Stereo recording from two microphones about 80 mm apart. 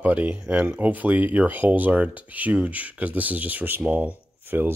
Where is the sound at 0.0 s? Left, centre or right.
Centre.